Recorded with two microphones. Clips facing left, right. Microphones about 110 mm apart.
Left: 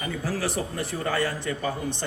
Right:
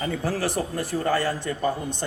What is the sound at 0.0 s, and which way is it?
A man's voice, 45° right (ahead or behind).